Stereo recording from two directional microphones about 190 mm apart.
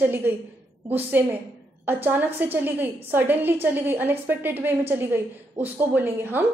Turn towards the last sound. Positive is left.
turn(degrees=-10)  # may be behind; listen again after turning